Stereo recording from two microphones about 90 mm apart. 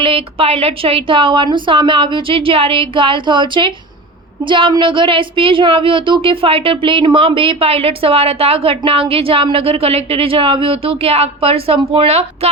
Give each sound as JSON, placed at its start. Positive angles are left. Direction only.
{"t": 0.0, "sound": "a woman's voice", "side_deg": -90}